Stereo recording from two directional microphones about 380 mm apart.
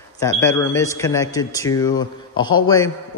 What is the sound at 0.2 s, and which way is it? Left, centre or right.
A man's voice, centre.